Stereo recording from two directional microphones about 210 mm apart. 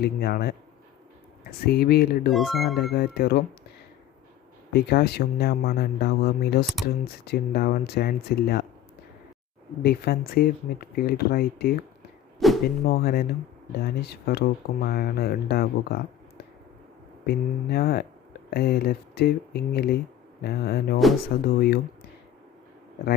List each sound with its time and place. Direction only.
0.0 s speech: 50° left (ahead or behind)
2.3 s speech: centre (ahead or behind)
2.9 s speech: 50° left (ahead or behind)
4.7 s speech: 50° left (ahead or behind)
9.8 s speech: 45° left (ahead or behind)
17.2 s speech: 50° left (ahead or behind)